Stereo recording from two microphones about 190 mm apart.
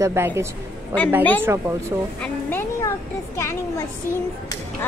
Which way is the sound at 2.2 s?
10° left (ahead or behind).